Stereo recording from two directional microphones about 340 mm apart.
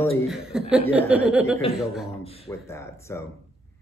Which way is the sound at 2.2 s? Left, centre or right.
Centre.